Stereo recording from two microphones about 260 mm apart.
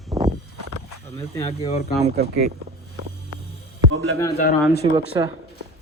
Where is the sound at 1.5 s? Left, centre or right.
Left.